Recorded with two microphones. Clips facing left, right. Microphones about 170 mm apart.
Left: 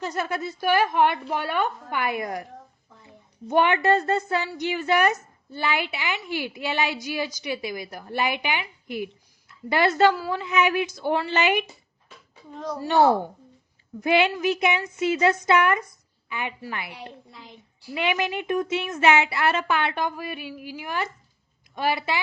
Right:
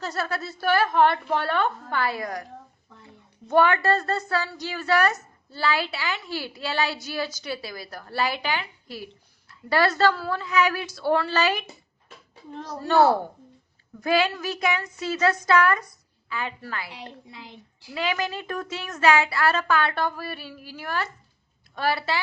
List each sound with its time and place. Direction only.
0.0 s a woman's voice: 15° left (ahead or behind)
3.5 s a woman's voice: 20° left (ahead or behind)
12.8 s a woman's voice: 15° left (ahead or behind)